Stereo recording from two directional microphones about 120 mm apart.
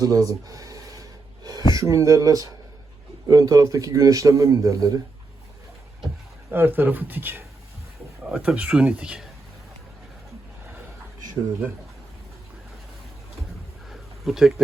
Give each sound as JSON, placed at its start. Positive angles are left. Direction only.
{"t": 0.0, "sound": "a man's voice", "side_deg": -30}
{"t": 6.5, "sound": "speech", "side_deg": -15}
{"t": 13.9, "sound": "a sound", "side_deg": 0}